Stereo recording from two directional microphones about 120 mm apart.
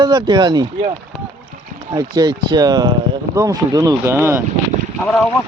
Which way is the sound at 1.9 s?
30° right (ahead or behind).